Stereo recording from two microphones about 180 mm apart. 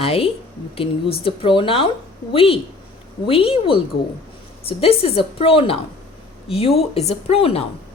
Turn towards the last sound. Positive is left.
turn(degrees=35)  # may be behind; listen again after turning